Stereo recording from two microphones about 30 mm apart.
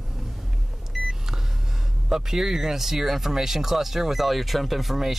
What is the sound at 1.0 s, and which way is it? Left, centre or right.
Vehicle, centre.